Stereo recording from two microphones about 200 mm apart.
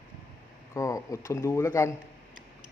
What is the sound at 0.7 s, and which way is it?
Speech, 15° left (ahead or behind).